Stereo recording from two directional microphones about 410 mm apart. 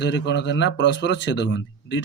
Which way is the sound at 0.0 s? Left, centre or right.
Left.